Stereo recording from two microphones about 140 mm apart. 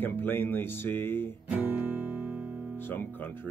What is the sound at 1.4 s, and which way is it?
Music, 10° right (ahead or behind).